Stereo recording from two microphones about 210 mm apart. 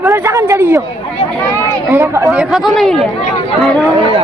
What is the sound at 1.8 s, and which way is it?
Speech, 15° right (ahead or behind).